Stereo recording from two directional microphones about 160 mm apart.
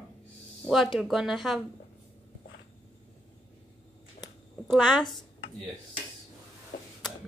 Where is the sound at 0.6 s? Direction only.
Centre (ahead or behind).